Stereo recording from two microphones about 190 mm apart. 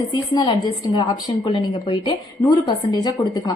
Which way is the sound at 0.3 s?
25° left (ahead or behind).